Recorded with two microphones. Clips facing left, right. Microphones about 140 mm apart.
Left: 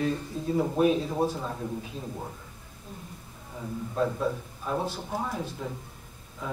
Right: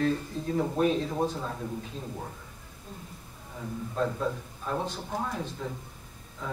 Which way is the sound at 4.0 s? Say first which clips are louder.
Left 2 dB; 5° left (ahead or behind).